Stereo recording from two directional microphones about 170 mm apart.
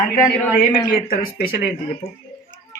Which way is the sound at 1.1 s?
60° left (ahead or behind).